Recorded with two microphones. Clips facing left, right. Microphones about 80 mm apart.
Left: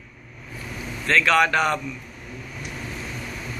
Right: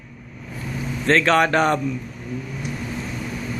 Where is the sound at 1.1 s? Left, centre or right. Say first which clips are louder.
Right 2 dB; right.